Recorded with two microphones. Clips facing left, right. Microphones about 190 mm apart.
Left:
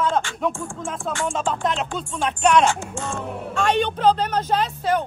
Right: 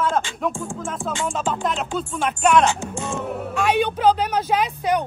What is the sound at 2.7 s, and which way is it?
Speech, 20° right (ahead or behind).